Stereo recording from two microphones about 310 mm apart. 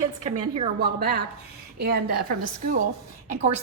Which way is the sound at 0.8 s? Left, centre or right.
Right.